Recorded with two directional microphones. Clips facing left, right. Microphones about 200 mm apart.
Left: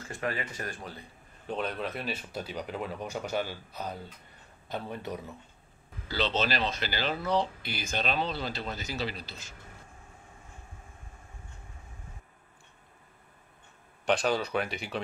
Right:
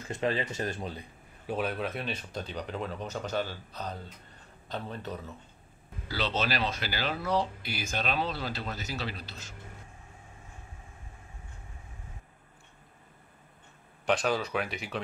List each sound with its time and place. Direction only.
0.1 s speech: 25° right (ahead or behind)
1.5 s speech: 5° right (ahead or behind); by 5.3 s 10° left (ahead or behind)
6.0 s speech: 5° right (ahead or behind)
14.0 s speech: centre (ahead or behind)